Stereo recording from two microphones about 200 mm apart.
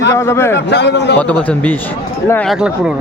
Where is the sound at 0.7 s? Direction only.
60° left (ahead or behind).